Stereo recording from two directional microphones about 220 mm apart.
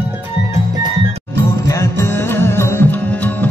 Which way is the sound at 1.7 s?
15° left (ahead or behind).